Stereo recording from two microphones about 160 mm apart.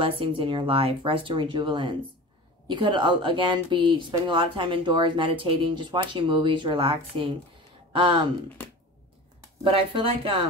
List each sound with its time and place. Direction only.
0.0 s speech: 30° right (ahead or behind)
9.6 s speech: 35° right (ahead or behind)